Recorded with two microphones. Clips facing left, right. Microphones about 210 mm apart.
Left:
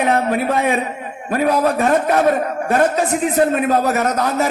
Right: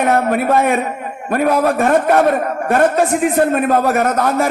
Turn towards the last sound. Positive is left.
turn(degrees=-50)  # may be behind; listen again after turning